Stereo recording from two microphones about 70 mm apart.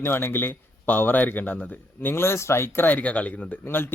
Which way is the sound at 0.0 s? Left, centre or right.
Left.